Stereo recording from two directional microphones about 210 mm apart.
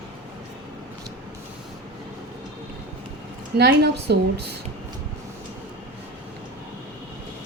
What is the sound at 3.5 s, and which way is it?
Speech, 50° right (ahead or behind).